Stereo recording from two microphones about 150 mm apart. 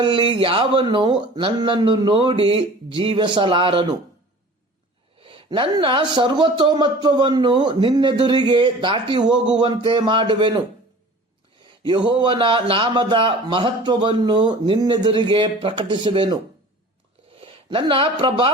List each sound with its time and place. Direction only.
0.0 s speech: 35° right (ahead or behind)
5.2 s speech: 35° right (ahead or behind)
11.9 s speech: 30° right (ahead or behind)
17.4 s speech: 35° right (ahead or behind)